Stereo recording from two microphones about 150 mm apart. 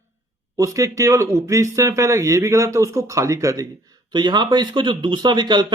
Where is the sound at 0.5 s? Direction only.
20° right (ahead or behind).